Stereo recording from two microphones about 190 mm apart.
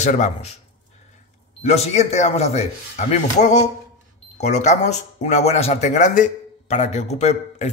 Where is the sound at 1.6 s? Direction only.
35° left (ahead or behind).